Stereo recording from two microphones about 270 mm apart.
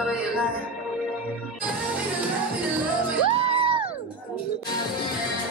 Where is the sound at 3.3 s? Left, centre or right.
Right.